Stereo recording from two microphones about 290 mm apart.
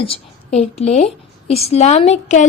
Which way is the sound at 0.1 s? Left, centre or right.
Left.